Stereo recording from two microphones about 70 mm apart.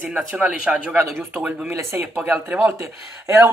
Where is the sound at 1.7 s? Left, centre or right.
Right.